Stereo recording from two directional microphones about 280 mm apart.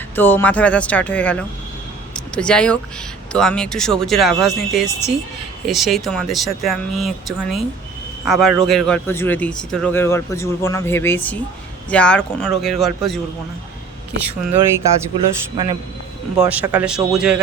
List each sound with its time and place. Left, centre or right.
0.2 s speech: centre
2.1 s a sound: centre
3.3 s speech: centre
14.2 s speech: centre
15.1 s a man's voice: centre
16.4 s speech: centre